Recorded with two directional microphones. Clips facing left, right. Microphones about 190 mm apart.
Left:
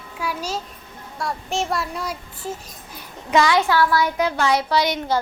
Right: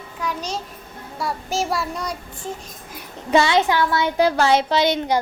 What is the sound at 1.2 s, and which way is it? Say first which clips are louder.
Child singing: right 1 dB; centre (ahead or behind).